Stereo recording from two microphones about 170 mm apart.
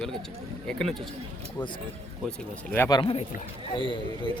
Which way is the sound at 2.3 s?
10° left (ahead or behind).